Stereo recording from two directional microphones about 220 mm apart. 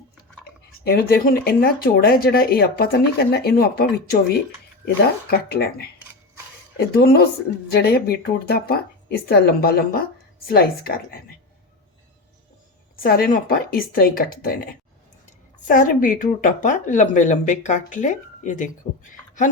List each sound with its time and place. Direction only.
0.4 s speech: 45° left (ahead or behind)
5.3 s speech: 45° left (ahead or behind)
13.0 s a woman's voice: 45° left (ahead or behind)